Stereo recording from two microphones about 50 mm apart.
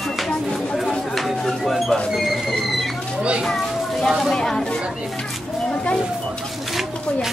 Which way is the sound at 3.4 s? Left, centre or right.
Centre.